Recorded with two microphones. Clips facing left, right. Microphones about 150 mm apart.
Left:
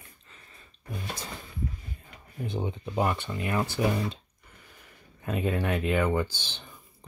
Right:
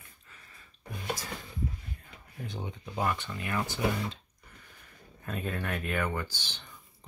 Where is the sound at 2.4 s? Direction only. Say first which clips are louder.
Left 8 dB; 20° left (ahead or behind).